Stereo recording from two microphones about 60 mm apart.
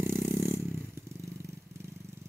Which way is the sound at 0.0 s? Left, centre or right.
Right.